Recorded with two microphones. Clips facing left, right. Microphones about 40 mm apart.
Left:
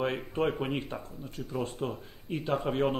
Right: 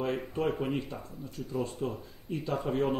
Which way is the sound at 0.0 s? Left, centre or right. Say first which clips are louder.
Left 1 dB; left.